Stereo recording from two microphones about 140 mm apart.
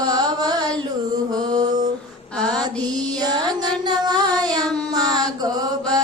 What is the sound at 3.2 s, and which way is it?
Child singing, 30° right (ahead or behind).